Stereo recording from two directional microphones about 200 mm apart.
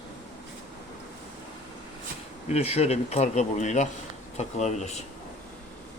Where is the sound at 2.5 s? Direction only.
30° left (ahead or behind).